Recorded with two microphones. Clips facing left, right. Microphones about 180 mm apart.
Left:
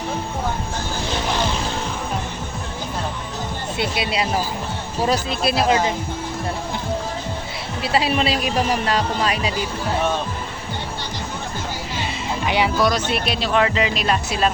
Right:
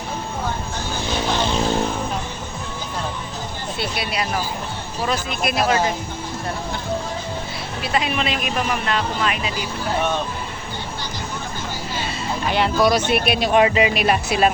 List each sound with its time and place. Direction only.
3.8 s speech: 25° left (ahead or behind)
7.8 s speech: 30° left (ahead or behind)
12.5 s speech: 10° left (ahead or behind)
12.8 s speech: 10° right (ahead or behind)